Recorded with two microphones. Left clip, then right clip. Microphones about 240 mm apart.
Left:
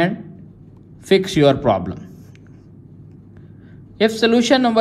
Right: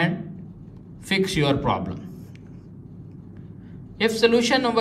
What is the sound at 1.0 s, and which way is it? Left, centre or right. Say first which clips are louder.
Speech: left 8 dB; left.